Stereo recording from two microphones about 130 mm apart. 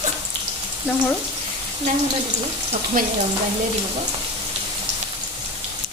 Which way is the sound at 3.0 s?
90° right.